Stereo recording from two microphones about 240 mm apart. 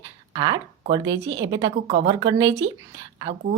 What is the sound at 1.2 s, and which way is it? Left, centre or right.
Speech, right.